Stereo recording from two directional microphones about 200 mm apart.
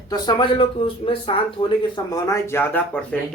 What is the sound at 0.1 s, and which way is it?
Speech, 25° left (ahead or behind).